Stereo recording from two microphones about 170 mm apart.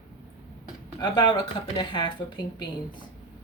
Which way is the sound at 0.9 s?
25° left (ahead or behind).